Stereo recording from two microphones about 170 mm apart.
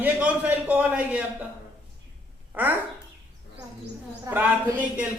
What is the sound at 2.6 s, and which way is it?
Speech, 10° right (ahead or behind).